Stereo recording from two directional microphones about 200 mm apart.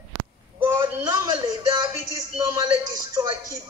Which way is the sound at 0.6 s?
15° right (ahead or behind).